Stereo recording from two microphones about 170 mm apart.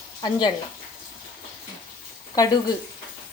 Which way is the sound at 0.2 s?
25° left (ahead or behind).